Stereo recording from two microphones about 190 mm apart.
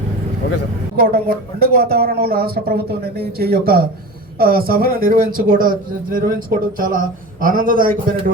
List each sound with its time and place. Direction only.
0.9 s speech: 55° right (ahead or behind)